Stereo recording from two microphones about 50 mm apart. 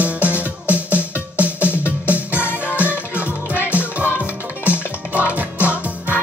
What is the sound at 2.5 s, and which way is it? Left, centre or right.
Music, left.